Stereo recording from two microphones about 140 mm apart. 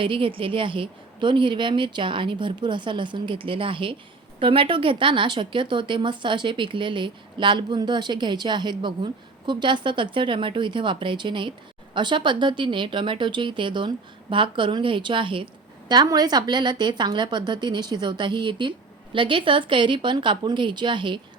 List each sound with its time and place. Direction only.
0.0 s a woman's voice: 40° right (ahead or behind)